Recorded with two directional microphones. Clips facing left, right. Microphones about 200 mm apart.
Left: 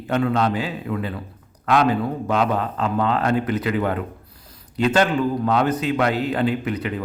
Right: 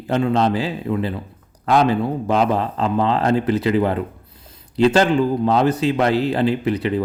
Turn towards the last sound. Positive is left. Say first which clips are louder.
# right 3 dB
turn(degrees=-30)  # may be behind; listen again after turning